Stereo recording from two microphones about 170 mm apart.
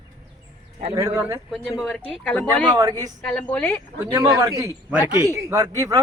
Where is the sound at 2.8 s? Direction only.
20° right (ahead or behind).